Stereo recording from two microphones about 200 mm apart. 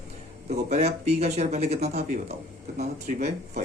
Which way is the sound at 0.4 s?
35° right (ahead or behind).